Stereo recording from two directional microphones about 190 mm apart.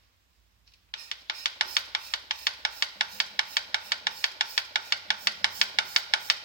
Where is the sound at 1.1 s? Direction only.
50° left (ahead or behind).